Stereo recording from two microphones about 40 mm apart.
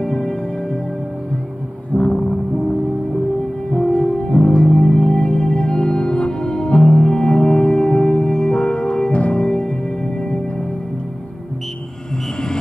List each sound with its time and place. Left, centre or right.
0.0 s music: centre
2.0 s music: left
3.7 s music: left